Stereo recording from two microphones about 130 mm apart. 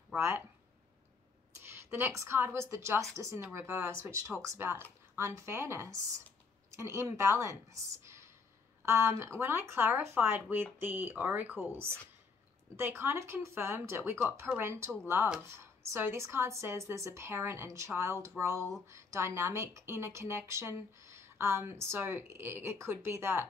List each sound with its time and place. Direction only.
0.1 s speech: 20° right (ahead or behind)
1.6 s speech: 15° right (ahead or behind)